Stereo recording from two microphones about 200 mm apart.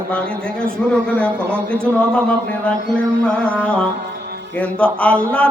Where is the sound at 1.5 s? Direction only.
10° right (ahead or behind).